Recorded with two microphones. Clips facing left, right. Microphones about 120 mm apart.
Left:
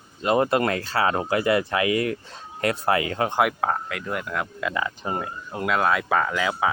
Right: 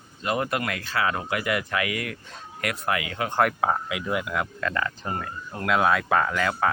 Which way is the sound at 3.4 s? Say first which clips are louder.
Right 2 dB; centre (ahead or behind).